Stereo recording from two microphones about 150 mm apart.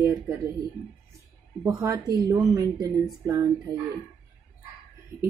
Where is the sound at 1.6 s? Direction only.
20° right (ahead or behind).